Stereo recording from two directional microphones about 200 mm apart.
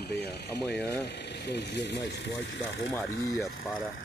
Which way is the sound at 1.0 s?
55° left (ahead or behind).